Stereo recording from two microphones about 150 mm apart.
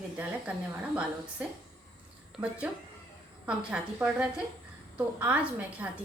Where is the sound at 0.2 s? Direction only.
5° right (ahead or behind).